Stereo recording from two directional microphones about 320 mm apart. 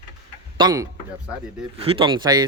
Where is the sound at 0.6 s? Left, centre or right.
Centre.